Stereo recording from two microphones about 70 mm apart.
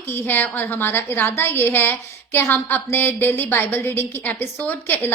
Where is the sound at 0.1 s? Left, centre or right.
Left.